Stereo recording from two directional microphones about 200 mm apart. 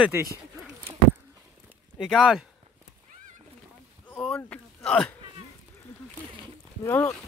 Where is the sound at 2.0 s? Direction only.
Centre (ahead or behind).